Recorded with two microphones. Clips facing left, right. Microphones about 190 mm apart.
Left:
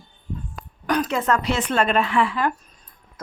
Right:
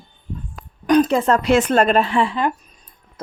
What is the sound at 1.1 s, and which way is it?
Speech, 30° right (ahead or behind).